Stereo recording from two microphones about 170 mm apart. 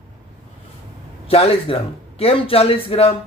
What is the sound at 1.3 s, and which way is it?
A man's voice, 35° left (ahead or behind).